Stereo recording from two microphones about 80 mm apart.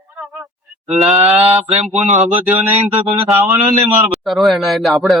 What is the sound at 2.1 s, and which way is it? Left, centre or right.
Speech, right.